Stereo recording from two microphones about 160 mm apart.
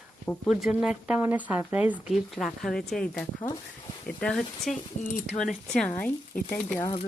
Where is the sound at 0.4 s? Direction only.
5° right (ahead or behind).